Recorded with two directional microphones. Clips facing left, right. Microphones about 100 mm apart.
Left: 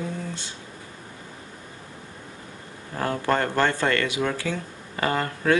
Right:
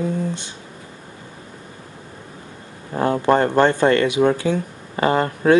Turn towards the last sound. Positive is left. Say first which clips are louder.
# right 7 dB
turn(degrees=-25)  # may be behind; listen again after turning